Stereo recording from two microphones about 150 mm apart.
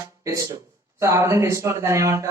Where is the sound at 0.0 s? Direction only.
20° right (ahead or behind).